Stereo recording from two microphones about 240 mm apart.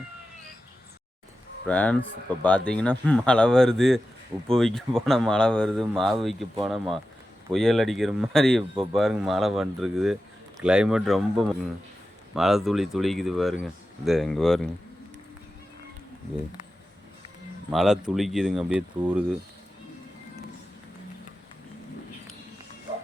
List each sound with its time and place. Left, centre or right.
1.6 s speech: centre
7.5 s speech: centre
17.7 s speech: centre